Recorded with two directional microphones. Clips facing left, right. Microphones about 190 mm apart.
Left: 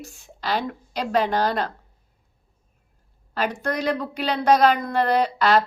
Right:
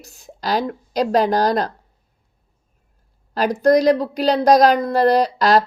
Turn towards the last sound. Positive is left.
turn(degrees=-40)  # may be behind; listen again after turning